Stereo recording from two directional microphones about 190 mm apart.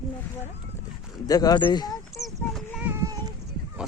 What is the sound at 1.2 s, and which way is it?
Speech, 20° left (ahead or behind).